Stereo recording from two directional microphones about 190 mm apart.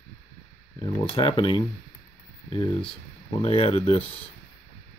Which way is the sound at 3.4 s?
30° left (ahead or behind).